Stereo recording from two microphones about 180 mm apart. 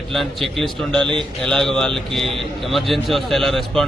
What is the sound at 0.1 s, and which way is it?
A man's voice, centre (ahead or behind).